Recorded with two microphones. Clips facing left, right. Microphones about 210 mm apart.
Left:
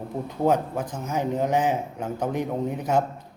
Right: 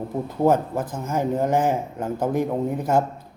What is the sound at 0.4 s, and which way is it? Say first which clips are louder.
A man's voice: right 3 dB; 5° right (ahead or behind).